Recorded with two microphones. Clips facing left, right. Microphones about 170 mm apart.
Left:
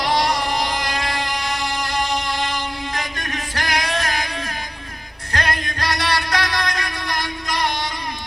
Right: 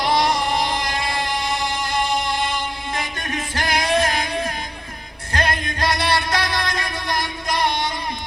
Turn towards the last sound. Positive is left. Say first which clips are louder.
# right 2 dB
turn(degrees=-25)  # may be behind; listen again after turning